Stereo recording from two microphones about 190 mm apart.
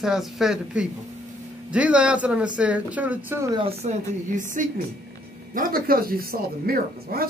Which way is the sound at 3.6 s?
30° right (ahead or behind).